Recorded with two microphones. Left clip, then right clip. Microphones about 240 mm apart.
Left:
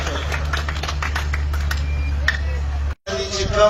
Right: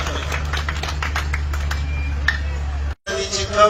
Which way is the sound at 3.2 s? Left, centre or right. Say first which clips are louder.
Right 1 dB; right.